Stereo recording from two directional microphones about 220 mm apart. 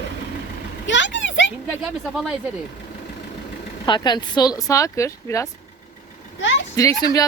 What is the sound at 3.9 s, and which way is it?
Speech, 20° left (ahead or behind).